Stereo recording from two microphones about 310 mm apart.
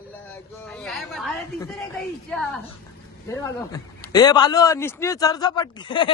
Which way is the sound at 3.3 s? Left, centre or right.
Centre.